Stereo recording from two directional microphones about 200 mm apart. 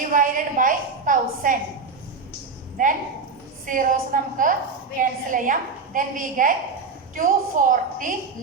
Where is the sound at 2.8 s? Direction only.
40° right (ahead or behind).